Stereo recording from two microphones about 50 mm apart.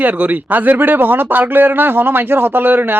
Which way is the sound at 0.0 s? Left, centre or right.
Right.